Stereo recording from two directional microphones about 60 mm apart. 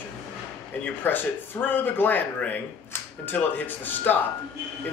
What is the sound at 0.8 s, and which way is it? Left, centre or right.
Speech, left.